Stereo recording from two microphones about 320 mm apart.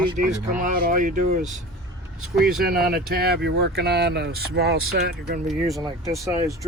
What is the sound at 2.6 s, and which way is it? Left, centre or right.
Speech, right.